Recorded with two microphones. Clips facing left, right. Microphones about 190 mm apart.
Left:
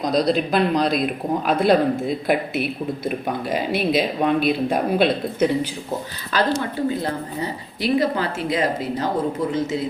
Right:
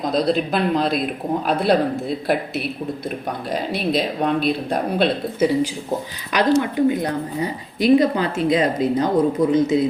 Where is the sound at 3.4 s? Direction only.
5° left (ahead or behind).